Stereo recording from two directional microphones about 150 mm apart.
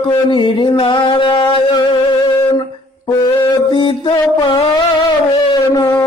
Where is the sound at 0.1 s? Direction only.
35° left (ahead or behind).